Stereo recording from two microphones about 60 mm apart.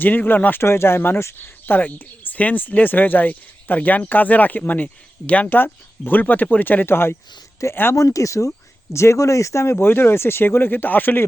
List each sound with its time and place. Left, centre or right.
0.0 s speech: left
0.6 s speech: left
7.6 s speech: left
9.7 s speech: left